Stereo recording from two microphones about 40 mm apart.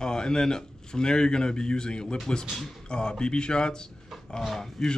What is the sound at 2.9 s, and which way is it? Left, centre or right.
Speech, left.